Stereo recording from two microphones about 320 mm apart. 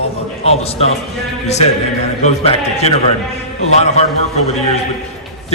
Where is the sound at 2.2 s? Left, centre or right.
Centre.